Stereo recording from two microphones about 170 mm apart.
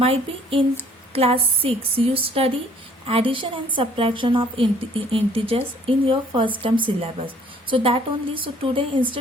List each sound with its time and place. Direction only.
0.0 s speech: 35° right (ahead or behind)